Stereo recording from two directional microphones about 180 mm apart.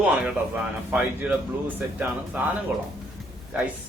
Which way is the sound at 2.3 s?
10° right (ahead or behind).